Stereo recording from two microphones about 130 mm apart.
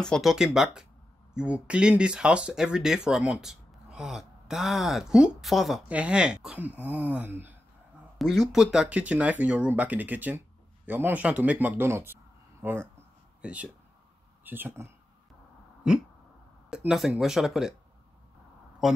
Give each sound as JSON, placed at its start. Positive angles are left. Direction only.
{"t": 0.0, "sound": "speech", "side_deg": 0}
{"t": 8.5, "sound": "speech", "side_deg": -5}
{"t": 13.4, "sound": "speech", "side_deg": -10}
{"t": 15.8, "sound": "a sound", "side_deg": -5}
{"t": 16.7, "sound": "speech", "side_deg": -5}